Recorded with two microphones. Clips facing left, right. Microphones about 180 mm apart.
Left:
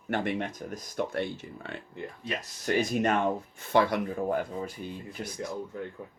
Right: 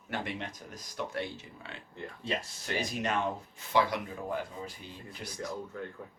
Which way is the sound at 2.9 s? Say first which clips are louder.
Left 6 dB; 50° left (ahead or behind).